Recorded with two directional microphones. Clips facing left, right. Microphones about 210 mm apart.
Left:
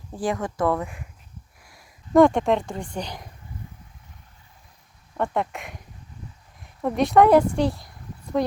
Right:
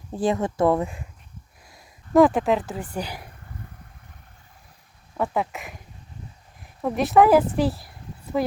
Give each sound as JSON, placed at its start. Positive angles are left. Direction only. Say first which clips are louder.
{"t": 0.2, "sound": "speech", "louder": "right 3 dB", "side_deg": -25}
{"t": 2.1, "sound": "speech", "louder": "left 1 dB", "side_deg": -5}
{"t": 5.1, "sound": "speech", "louder": "even", "side_deg": -5}
{"t": 6.8, "sound": "speech", "louder": "even", "side_deg": -5}
{"t": 7.5, "sound": "a sound", "louder": "even", "side_deg": -5}